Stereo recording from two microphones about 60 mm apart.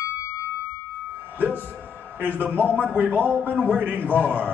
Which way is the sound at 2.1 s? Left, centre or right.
Right.